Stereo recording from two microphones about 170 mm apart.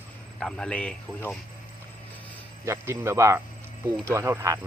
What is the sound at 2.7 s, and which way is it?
Speech, 15° right (ahead or behind).